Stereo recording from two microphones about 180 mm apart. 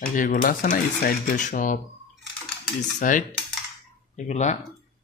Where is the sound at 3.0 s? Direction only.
45° left (ahead or behind).